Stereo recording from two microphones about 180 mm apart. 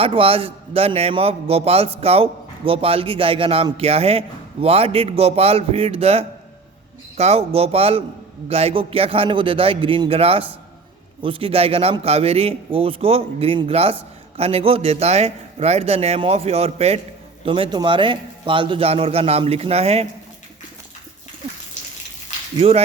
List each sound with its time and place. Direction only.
0.0 s a man's voice: 30° right (ahead or behind)
22.6 s a man's voice: 30° right (ahead or behind)